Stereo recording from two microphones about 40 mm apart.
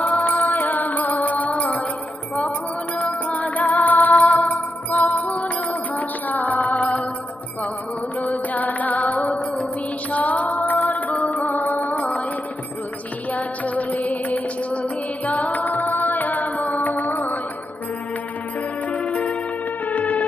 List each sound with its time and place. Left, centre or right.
0.0 s music: left
3.0 s music: left
8.3 s music: left
13.3 s music: left
19.0 s music: left
19.9 s music: left